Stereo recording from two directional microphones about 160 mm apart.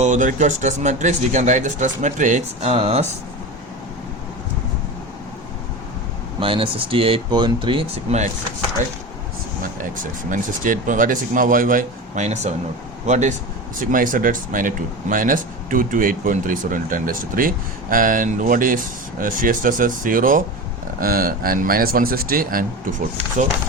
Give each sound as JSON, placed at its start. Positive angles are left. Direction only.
{"t": 0.0, "sound": "speech", "side_deg": -50}
{"t": 6.4, "sound": "speech", "side_deg": -35}
{"t": 9.8, "sound": "speech", "side_deg": -55}
{"t": 13.7, "sound": "speech", "side_deg": -60}